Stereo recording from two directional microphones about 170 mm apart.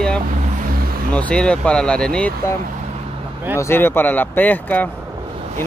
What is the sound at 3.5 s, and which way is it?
Speech, 15° left (ahead or behind).